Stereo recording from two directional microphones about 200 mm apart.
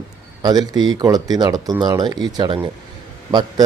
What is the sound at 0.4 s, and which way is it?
A man's voice, 20° right (ahead or behind).